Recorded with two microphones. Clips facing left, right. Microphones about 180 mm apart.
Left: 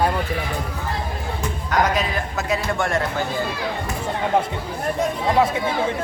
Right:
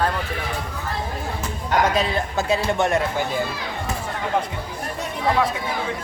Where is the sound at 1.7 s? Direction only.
30° right (ahead or behind).